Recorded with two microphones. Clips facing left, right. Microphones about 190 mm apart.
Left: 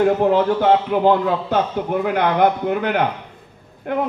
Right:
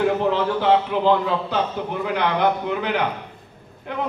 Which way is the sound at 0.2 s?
50° left (ahead or behind).